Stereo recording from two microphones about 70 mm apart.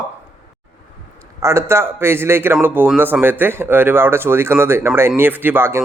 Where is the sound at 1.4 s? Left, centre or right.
Right.